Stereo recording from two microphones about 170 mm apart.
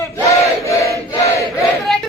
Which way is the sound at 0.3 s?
20° left (ahead or behind).